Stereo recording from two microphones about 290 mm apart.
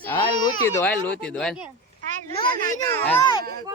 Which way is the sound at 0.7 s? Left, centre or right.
Centre.